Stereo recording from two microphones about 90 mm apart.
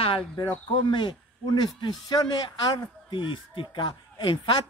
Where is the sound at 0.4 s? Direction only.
60° left (ahead or behind).